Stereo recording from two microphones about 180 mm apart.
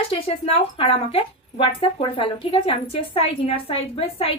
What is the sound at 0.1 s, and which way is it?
A woman's voice, 35° left (ahead or behind).